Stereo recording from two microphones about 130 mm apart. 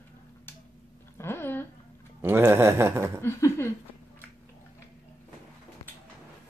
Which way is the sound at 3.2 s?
20° left (ahead or behind).